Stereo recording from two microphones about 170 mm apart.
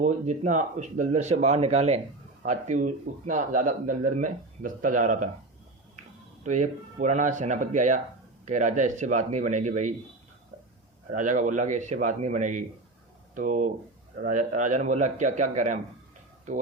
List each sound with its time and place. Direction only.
0.0 s speech: 45° right (ahead or behind)
6.4 s speech: 45° right (ahead or behind)
11.1 s speech: 50° right (ahead or behind)